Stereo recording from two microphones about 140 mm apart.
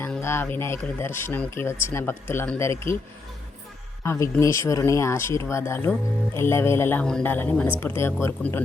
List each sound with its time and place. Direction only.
0.2 s speech: 15° left (ahead or behind)
4.0 s speech: 20° left (ahead or behind)